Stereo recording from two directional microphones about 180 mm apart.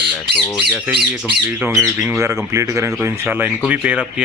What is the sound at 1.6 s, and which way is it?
Speech, 15° right (ahead or behind).